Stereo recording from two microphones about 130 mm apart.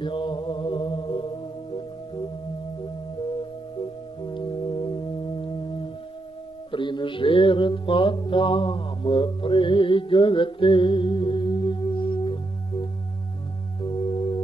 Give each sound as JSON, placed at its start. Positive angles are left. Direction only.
{"t": 0.0, "sound": "music", "side_deg": 40}
{"t": 4.2, "sound": "music", "side_deg": 35}
{"t": 6.7, "sound": "music", "side_deg": 40}